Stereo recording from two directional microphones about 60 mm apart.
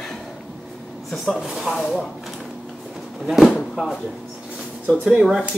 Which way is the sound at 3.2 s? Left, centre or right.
Centre.